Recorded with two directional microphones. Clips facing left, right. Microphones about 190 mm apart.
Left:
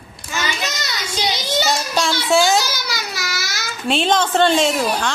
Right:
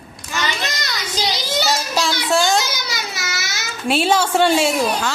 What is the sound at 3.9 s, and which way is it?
A woman's voice, 5° right (ahead or behind).